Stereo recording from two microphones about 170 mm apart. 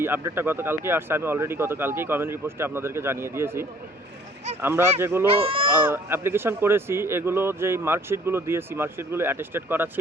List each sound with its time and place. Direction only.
0.0 s speech: 15° right (ahead or behind)
5.3 s speech: 35° right (ahead or behind)
5.9 s speech: 15° right (ahead or behind)